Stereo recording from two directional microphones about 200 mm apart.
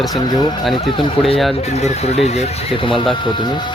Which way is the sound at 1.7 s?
35° left (ahead or behind).